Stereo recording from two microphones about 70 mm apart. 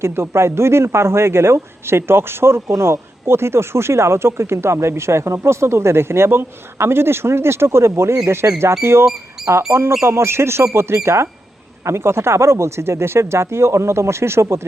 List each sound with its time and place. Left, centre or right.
0.0 s a man's voice: right